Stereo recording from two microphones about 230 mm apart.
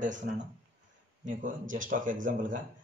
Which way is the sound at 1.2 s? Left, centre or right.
Right.